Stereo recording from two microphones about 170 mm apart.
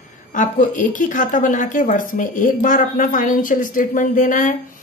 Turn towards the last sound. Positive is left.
turn(degrees=50)  # may be behind; listen again after turning